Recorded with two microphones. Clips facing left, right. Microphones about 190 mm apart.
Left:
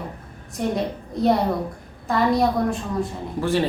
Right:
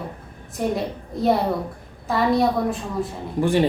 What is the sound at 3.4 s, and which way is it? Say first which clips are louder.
Speech: right 3 dB; 15° right (ahead or behind).